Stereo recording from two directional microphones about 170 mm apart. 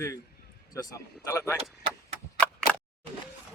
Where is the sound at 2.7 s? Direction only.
10° left (ahead or behind).